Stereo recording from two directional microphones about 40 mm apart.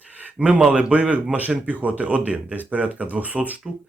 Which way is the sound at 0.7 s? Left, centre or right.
Right.